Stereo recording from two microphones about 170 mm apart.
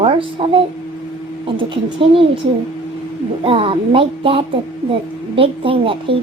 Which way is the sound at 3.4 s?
30° right (ahead or behind).